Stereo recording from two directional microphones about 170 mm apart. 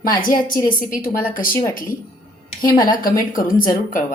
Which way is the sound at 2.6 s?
55° left (ahead or behind).